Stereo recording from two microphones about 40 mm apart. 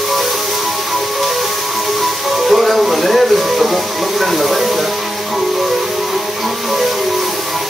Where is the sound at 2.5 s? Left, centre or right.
Centre.